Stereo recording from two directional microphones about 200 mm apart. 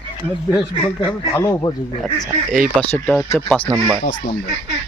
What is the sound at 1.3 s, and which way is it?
Speech, 15° left (ahead or behind).